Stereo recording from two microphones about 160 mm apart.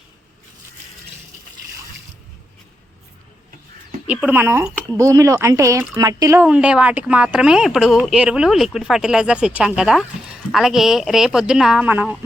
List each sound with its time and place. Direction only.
4.0 s speech: 10° right (ahead or behind)
6.4 s speech: 10° right (ahead or behind)